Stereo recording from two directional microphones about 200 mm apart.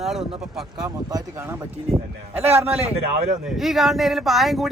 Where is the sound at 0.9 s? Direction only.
15° right (ahead or behind).